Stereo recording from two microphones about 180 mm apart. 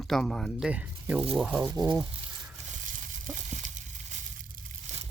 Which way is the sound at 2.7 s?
45° right (ahead or behind).